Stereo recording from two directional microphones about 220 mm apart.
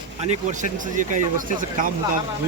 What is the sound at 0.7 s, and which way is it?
A man's voice, 35° right (ahead or behind).